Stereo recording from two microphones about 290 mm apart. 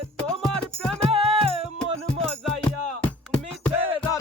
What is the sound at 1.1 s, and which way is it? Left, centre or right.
Music, centre.